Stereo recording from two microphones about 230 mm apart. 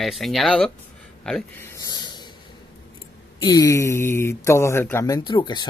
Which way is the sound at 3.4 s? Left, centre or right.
Centre.